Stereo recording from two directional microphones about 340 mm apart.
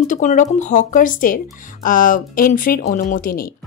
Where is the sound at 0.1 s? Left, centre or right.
Left.